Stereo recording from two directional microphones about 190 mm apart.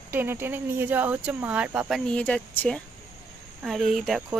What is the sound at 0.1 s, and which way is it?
Speech, 10° right (ahead or behind).